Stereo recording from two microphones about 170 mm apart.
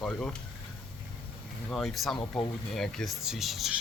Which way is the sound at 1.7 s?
Centre (ahead or behind).